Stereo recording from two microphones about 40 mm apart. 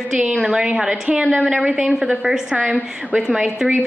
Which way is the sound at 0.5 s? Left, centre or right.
Right.